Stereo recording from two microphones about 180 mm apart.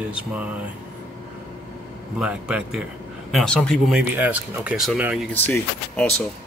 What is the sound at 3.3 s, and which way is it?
Speech, 5° left (ahead or behind).